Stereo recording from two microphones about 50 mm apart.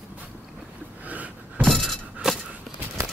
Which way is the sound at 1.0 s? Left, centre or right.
Right.